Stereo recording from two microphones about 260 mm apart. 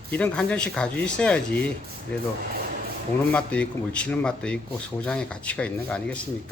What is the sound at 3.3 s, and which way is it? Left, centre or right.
Speech, centre.